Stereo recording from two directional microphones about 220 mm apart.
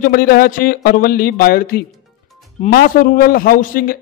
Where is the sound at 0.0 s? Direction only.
40° left (ahead or behind).